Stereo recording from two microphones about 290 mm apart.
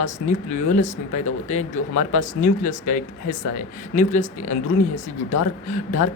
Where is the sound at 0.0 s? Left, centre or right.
Left.